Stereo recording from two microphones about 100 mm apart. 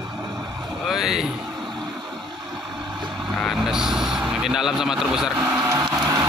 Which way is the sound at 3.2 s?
Centre (ahead or behind).